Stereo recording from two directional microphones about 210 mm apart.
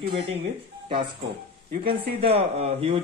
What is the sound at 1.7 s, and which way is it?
A man's voice, 25° right (ahead or behind).